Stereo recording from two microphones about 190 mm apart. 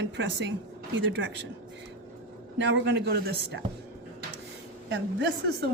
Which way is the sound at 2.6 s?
65° right (ahead or behind).